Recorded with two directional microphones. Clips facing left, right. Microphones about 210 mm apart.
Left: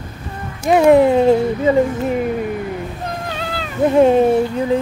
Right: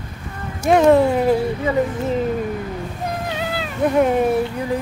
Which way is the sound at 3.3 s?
10° right (ahead or behind).